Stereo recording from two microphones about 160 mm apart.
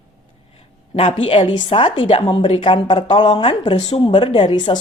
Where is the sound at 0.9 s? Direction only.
35° left (ahead or behind).